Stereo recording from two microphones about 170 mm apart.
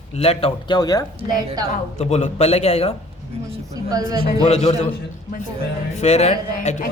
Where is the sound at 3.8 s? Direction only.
20° right (ahead or behind).